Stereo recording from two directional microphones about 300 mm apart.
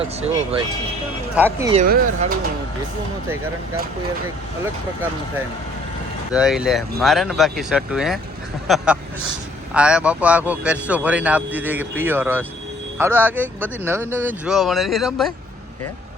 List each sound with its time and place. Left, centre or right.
1.4 s speech: centre
1.7 s speech: right
6.3 s speech: centre